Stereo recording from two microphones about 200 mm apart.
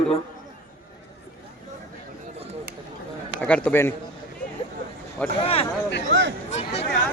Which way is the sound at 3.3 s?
5° left (ahead or behind).